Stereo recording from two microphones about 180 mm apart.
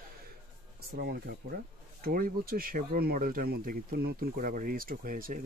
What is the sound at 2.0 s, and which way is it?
Speech, 55° right (ahead or behind).